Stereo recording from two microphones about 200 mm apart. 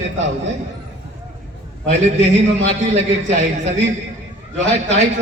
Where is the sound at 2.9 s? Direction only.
35° right (ahead or behind).